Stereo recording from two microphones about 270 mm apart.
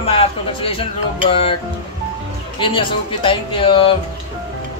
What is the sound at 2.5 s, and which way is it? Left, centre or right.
A man's voice, centre.